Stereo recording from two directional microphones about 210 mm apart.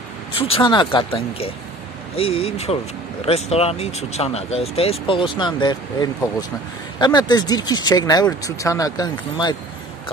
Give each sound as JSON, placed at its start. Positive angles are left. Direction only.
{"t": 0.4, "sound": "speech", "side_deg": 25}